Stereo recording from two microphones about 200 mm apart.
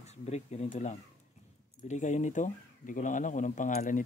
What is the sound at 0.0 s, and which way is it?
Speech, 35° left (ahead or behind).